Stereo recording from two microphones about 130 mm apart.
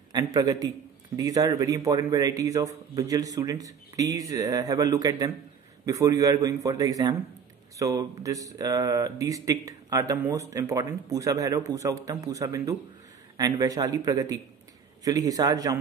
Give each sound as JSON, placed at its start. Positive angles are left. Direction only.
{"t": 0.1, "sound": "a man's voice", "side_deg": -25}